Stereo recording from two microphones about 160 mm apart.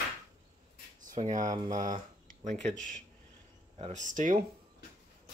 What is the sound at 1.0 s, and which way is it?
Speech, 50° right (ahead or behind).